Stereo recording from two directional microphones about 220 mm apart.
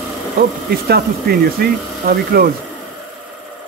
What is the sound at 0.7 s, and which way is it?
Speech, 45° right (ahead or behind).